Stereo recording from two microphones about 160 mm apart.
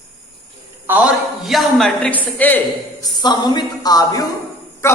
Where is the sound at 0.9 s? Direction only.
5° right (ahead or behind).